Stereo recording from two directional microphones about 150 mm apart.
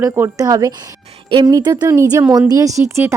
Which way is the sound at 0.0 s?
20° right (ahead or behind).